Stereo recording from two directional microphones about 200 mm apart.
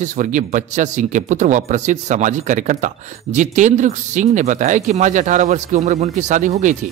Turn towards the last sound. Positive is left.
turn(degrees=-40)  # may be behind; listen again after turning